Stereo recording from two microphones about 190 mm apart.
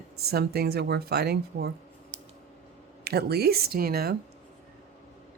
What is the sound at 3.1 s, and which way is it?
Speech, 55° right (ahead or behind).